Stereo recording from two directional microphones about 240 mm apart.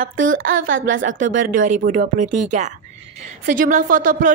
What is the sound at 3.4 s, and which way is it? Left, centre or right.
Speech, right.